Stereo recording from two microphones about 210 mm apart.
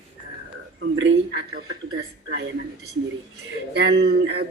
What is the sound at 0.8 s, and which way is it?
Speech, 60° right (ahead or behind).